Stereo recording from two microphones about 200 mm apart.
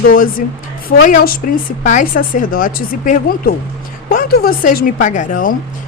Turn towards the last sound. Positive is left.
turn(degrees=40)  # may be behind; listen again after turning